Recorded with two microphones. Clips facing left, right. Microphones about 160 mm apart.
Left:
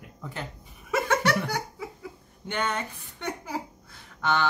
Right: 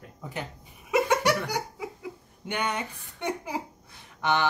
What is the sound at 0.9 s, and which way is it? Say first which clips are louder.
Laughter: right 1 dB; 15° right (ahead or behind).